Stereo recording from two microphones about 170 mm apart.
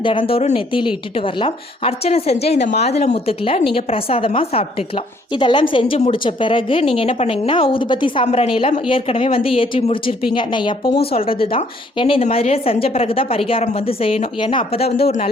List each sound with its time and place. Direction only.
0.0 s a woman's voice: 30° left (ahead or behind)